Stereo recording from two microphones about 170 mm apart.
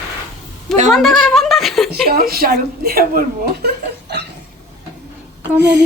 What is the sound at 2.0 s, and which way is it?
A woman's voice, 60° right (ahead or behind).